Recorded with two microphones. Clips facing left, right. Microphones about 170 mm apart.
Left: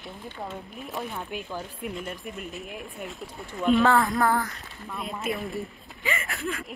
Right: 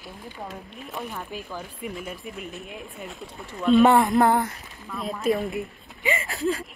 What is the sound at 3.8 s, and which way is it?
Speech, 20° right (ahead or behind).